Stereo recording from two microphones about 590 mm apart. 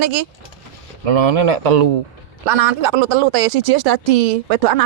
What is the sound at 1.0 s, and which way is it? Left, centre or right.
Speech, right.